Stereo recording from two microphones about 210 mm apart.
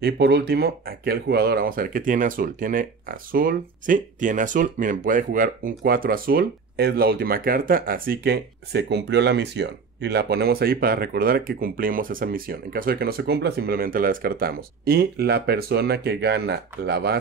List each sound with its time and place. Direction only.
0.0 s speech: 50° right (ahead or behind)